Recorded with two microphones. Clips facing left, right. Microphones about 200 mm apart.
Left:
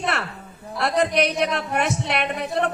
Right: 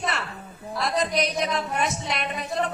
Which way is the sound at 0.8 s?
65° left (ahead or behind).